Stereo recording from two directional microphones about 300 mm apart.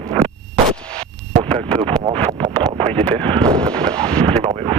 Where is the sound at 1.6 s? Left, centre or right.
Centre.